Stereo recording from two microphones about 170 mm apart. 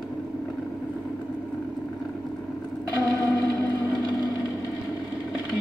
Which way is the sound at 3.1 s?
20° left (ahead or behind).